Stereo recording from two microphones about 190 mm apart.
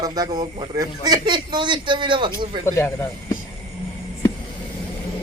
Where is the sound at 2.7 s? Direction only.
15° left (ahead or behind).